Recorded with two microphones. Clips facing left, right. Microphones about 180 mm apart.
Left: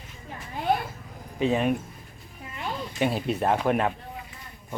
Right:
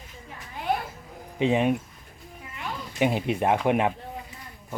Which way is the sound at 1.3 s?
20° right (ahead or behind).